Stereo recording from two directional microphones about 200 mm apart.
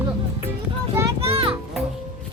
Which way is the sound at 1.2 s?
30° right (ahead or behind).